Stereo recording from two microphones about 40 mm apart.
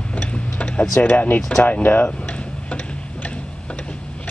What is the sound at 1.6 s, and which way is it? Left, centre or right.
Speech, left.